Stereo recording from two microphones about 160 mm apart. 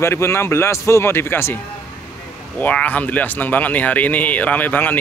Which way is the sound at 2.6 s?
10° left (ahead or behind).